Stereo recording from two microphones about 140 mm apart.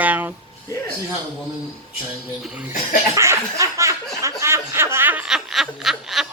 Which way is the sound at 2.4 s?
5° right (ahead or behind).